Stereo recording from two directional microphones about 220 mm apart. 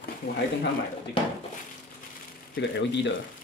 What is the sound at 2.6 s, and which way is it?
Speech, 55° left (ahead or behind).